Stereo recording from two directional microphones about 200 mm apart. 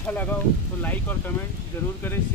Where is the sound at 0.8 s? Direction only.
10° left (ahead or behind).